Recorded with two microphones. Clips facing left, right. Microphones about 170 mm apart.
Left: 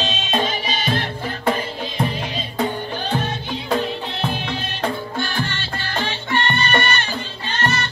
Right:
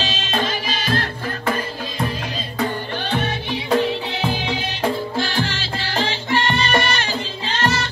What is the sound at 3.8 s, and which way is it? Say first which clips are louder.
Music: right 3 dB; 80° right.